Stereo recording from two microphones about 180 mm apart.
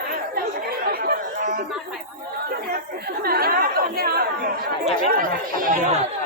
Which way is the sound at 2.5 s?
60° right (ahead or behind).